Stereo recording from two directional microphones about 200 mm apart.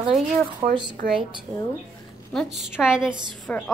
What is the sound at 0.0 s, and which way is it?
Speech, 25° right (ahead or behind).